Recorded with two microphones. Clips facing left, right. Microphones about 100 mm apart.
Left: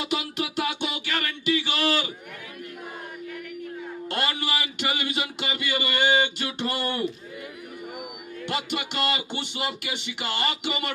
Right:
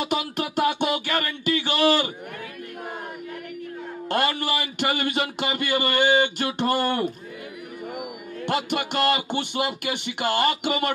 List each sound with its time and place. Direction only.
0.0 s a sound: 50° right (ahead or behind)
4.1 s speech: 50° right (ahead or behind)
8.5 s speech: 50° right (ahead or behind)